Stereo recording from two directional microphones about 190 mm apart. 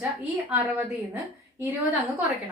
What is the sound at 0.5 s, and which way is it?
A woman's voice, 10° right (ahead or behind).